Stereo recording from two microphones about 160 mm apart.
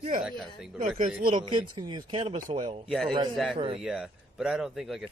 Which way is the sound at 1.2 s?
30° right (ahead or behind).